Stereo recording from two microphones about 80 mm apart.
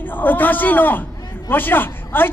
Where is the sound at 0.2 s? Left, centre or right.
Left.